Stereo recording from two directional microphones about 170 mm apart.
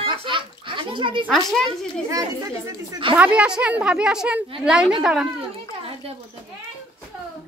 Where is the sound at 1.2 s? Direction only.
Centre (ahead or behind).